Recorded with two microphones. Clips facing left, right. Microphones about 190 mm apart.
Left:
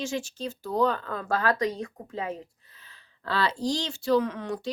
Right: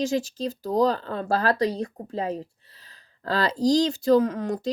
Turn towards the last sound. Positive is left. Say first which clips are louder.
# right 5 dB
turn(degrees=-40)  # may be behind; listen again after turning